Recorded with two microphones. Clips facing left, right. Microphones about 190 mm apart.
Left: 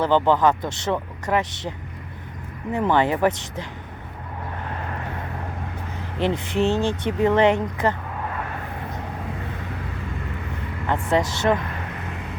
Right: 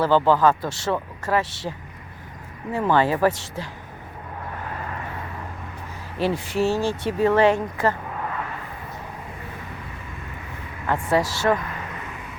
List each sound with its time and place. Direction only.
0.0 s speech: 20° left (ahead or behind)
2.7 s speech: 20° left (ahead or behind)
6.1 s speech: 20° left (ahead or behind)
11.1 s speech: 20° left (ahead or behind)